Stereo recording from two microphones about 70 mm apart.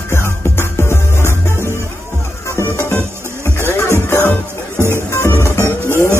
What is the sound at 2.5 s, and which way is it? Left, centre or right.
Music, left.